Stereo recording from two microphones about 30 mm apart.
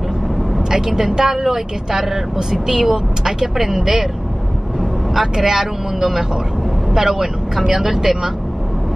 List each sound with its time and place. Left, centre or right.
0.7 s speech: centre
5.2 s speech: centre